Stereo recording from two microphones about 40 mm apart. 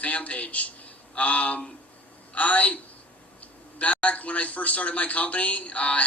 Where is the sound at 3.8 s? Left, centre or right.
Left.